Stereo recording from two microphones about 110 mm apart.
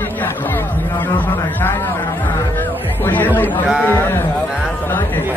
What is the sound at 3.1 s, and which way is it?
A man's voice, 15° left (ahead or behind).